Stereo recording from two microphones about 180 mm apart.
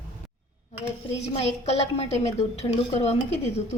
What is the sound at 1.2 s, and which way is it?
A woman's voice, 35° left (ahead or behind).